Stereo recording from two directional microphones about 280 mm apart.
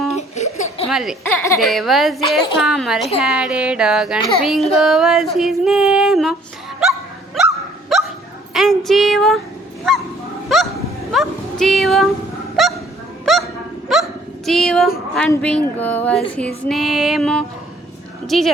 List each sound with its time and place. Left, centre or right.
0.2 s a sound: left
0.9 s speech: centre
7.9 s dog: centre
8.5 s speech: centre
10.5 s dog: centre
11.1 s speech: centre
12.6 s honk: centre
13.3 s dog: centre
13.9 s hiccup: centre
14.4 s speech: centre